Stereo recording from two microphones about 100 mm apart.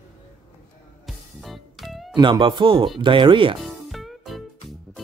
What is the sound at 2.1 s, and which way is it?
Speech, 50° right (ahead or behind).